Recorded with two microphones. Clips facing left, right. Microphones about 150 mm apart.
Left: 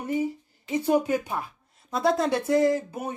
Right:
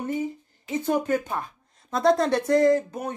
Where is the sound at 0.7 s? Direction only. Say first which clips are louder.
Left 1 dB; 10° left (ahead or behind).